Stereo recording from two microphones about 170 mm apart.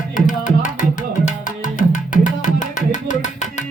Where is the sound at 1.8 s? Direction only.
50° left (ahead or behind).